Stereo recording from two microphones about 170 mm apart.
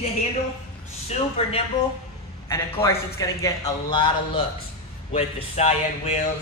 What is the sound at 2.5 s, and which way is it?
A man's voice, 15° left (ahead or behind).